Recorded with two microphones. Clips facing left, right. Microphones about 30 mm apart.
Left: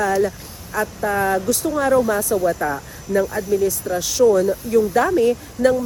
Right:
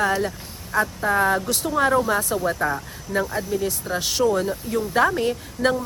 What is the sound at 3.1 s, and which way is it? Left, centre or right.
Speech, right.